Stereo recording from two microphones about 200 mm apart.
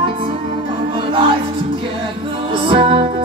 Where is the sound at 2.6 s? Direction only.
25° right (ahead or behind).